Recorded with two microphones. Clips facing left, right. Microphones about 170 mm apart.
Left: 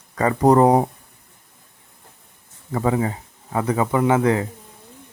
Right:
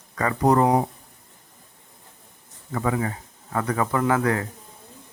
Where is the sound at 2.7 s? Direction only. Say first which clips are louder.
Left 4 dB; 25° left (ahead or behind).